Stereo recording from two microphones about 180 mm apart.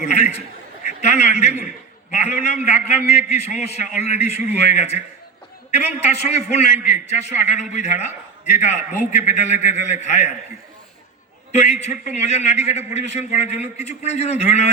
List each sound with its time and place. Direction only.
0.0 s a man's voice: 40° left (ahead or behind)
11.5 s a man's voice: 40° left (ahead or behind)